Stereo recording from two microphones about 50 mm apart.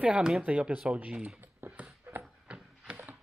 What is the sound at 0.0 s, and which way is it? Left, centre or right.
Speech, centre.